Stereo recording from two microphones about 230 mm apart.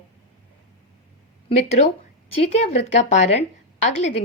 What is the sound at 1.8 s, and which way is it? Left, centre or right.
A woman's voice, left.